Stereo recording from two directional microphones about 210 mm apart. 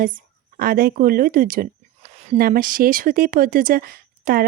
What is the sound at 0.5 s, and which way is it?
Speech, 45° right (ahead or behind).